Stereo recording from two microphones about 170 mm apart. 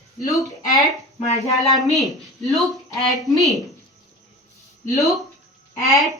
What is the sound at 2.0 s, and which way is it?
Speech, centre (ahead or behind).